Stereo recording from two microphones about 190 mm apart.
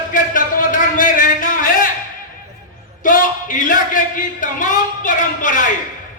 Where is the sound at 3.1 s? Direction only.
45° left (ahead or behind).